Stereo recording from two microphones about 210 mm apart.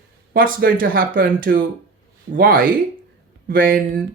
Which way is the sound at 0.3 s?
45° right (ahead or behind).